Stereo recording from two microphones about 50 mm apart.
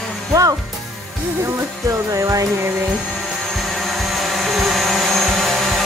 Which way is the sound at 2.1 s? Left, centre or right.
Right.